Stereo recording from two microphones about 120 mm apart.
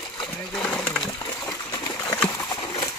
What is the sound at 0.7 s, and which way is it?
Pigeon, 5° left (ahead or behind).